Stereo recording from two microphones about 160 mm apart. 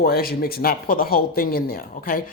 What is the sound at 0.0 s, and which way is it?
Speech, 70° left (ahead or behind).